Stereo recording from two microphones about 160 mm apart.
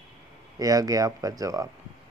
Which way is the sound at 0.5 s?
20° right (ahead or behind).